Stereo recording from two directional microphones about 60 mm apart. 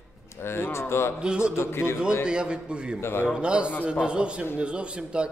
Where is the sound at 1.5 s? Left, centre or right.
Left.